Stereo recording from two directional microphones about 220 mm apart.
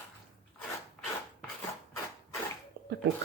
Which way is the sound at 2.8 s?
45° right (ahead or behind).